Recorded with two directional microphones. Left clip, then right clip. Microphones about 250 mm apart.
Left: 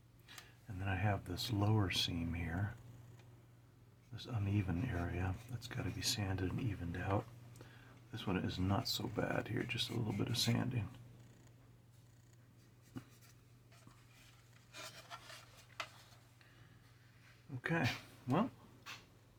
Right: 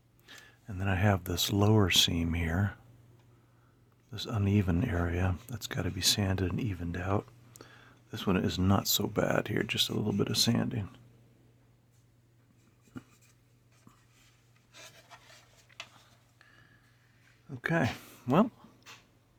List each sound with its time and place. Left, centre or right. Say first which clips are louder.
0.3 s a sound: right 4 dB; right
0.8 s speech: right 10 dB; right
4.1 s speech: right 11 dB; right
17.6 s speech: right 8 dB; right